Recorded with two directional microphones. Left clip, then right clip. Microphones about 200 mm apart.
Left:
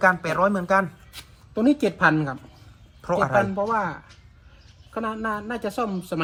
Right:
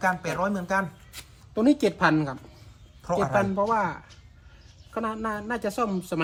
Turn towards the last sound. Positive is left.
turn(degrees=0)  # may be behind; listen again after turning